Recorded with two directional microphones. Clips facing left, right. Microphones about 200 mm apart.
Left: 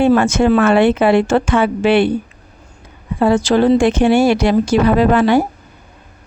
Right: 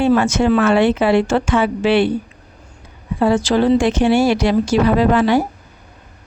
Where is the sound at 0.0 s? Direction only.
55° left (ahead or behind).